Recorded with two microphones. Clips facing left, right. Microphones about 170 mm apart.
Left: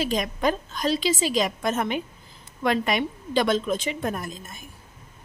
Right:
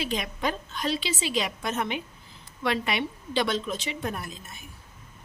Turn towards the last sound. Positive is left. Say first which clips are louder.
# left 4 dB
turn(degrees=45)  # may be behind; listen again after turning